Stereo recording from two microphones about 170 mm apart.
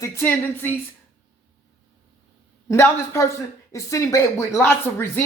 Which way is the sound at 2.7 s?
15° left (ahead or behind).